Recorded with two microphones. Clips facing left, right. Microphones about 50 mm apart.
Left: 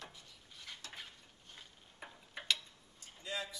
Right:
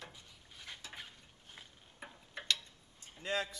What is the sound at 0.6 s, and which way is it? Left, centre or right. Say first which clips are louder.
Stir: right 1 dB; centre.